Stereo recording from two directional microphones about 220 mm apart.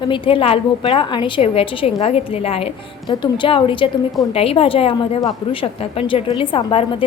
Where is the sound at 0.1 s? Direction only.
25° left (ahead or behind).